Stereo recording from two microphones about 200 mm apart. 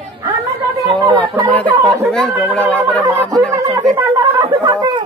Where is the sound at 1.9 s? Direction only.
5° left (ahead or behind).